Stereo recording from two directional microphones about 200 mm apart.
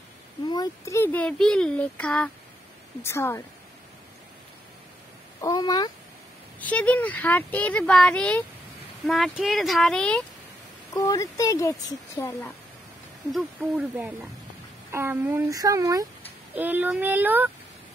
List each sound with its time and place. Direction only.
0.5 s speech: 15° left (ahead or behind)
5.4 s speech: 20° left (ahead or behind)
6.6 s speech: 5° left (ahead or behind)
10.9 s speech: 15° left (ahead or behind)
13.3 s speech: 5° right (ahead or behind)